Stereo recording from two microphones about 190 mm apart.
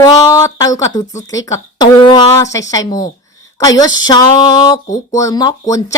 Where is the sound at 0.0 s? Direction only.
15° left (ahead or behind).